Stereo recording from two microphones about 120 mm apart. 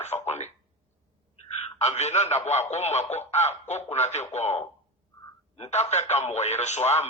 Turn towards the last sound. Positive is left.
turn(degrees=70)  # may be behind; listen again after turning